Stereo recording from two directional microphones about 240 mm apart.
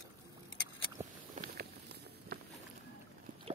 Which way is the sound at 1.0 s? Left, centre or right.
Centre.